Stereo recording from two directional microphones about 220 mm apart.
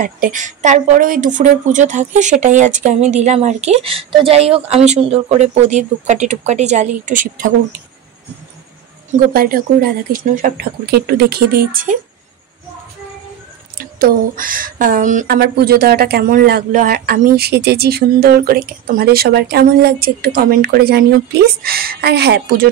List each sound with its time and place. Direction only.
0.0 s speech: 35° right (ahead or behind)
9.1 s speech: 40° right (ahead or behind)
13.7 s speech: 40° right (ahead or behind)